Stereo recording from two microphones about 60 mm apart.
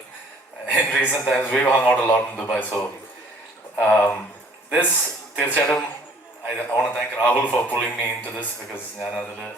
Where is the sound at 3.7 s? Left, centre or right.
Left.